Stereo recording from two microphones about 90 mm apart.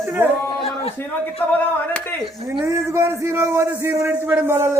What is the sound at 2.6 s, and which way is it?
A man's voice, 30° right (ahead or behind).